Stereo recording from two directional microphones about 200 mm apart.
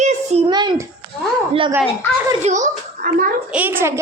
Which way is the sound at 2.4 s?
40° right (ahead or behind).